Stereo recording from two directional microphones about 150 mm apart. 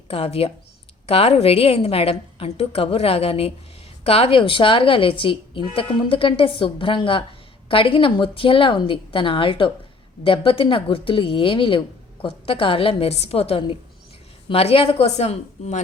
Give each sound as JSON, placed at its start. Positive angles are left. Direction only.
{"t": 0.1, "sound": "a woman's voice", "side_deg": 40}